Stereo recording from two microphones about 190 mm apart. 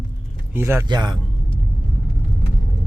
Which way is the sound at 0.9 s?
25° right (ahead or behind).